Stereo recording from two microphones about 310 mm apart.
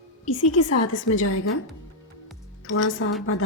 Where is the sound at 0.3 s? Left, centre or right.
Left.